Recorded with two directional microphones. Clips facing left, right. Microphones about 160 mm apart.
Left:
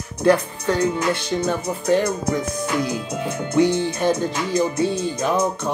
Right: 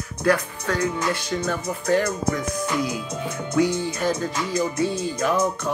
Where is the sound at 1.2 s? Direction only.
30° left (ahead or behind).